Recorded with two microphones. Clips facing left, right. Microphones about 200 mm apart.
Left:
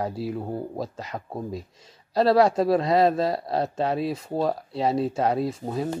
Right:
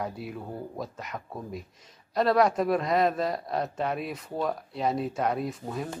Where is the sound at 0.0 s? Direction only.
30° left (ahead or behind).